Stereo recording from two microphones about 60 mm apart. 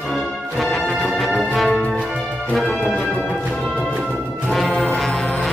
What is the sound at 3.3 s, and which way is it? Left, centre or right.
Music, centre.